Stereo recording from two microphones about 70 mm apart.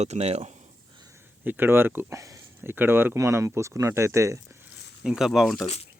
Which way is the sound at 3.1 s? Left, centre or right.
Right.